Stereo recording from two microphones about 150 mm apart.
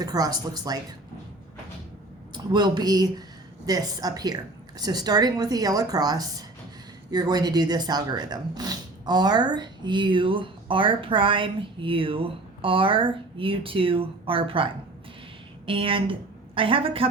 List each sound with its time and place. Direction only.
0.0 s speech: 25° right (ahead or behind)
2.3 s speech: 30° right (ahead or behind)